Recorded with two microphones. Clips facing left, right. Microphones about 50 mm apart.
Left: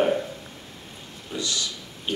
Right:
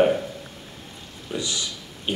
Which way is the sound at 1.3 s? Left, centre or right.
Centre.